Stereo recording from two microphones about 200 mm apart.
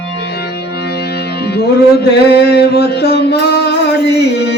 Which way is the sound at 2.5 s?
55° left (ahead or behind).